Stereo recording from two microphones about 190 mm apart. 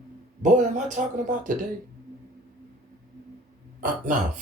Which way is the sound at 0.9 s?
40° right (ahead or behind).